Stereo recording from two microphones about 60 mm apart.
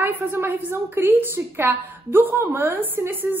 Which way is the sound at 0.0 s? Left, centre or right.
Right.